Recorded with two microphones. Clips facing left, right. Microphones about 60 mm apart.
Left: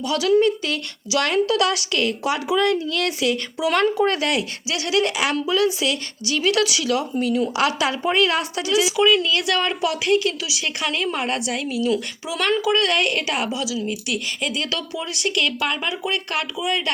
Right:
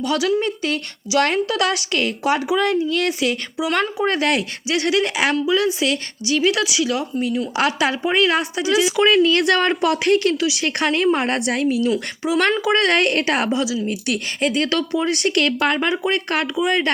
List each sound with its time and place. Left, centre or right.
0.4 s a woman's voice: right
9.0 s a woman's voice: right